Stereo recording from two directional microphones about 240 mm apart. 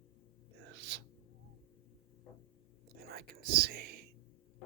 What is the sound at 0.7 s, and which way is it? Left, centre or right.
Gasp, right.